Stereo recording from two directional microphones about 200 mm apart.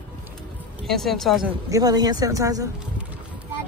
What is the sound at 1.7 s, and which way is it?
Speech, 20° right (ahead or behind).